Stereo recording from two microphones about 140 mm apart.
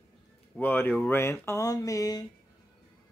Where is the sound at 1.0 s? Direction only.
15° left (ahead or behind).